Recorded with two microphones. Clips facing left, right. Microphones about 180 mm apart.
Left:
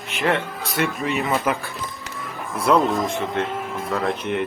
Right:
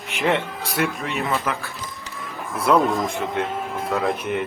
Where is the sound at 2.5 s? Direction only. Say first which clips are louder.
Even; centre (ahead or behind).